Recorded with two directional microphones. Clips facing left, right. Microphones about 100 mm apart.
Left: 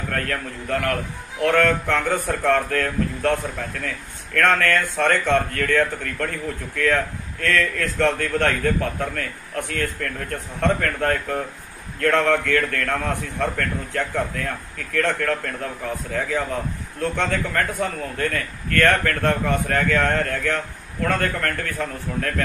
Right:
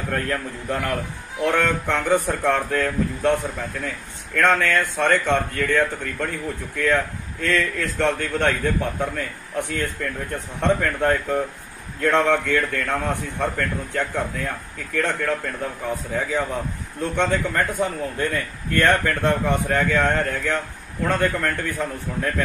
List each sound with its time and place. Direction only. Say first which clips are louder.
0.1 s speech: right 2 dB; 15° right (ahead or behind)
17.0 s speech: right 1 dB; 15° right (ahead or behind)